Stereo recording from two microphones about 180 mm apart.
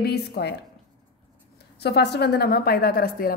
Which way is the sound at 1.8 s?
65° left (ahead or behind).